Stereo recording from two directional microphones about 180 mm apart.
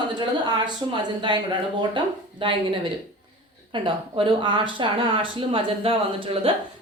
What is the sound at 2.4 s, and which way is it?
Speech, 30° right (ahead or behind).